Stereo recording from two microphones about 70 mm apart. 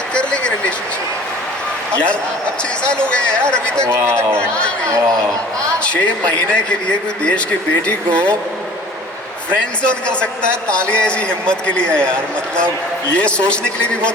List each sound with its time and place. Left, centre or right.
0.1 s a sound: centre
2.9 s a man's voice: centre
3.8 s a man's voice: right
4.9 s speech: right
6.5 s a man's voice: centre
10.7 s a man's voice: centre